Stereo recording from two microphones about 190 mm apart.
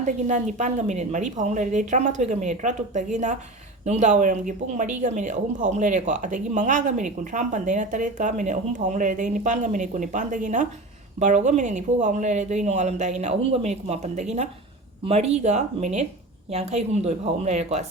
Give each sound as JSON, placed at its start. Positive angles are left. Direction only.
{"t": 0.0, "sound": "speech", "side_deg": -40}